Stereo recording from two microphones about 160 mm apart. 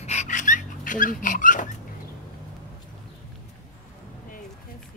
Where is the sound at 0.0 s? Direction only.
45° left (ahead or behind).